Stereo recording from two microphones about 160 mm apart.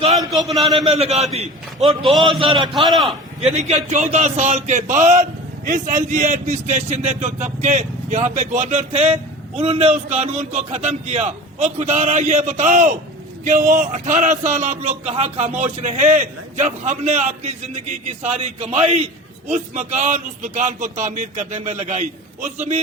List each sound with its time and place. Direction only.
0.1 s a man's voice: centre (ahead or behind)
0.9 s a man's voice: 40° right (ahead or behind)
2.0 s a man's voice: centre (ahead or behind)
2.4 s a man's voice: 30° right (ahead or behind)
2.9 s a man's voice: centre (ahead or behind)
3.4 s a man's voice: 45° right (ahead or behind)